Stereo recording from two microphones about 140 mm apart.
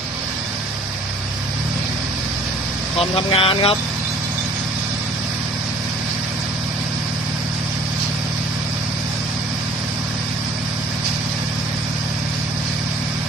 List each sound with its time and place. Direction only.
3.0 s speech: 45° left (ahead or behind)